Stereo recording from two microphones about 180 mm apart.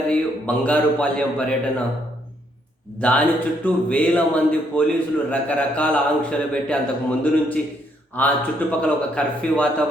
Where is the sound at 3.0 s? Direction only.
5° left (ahead or behind).